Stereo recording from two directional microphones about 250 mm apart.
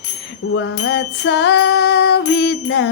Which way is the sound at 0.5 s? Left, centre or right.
Left.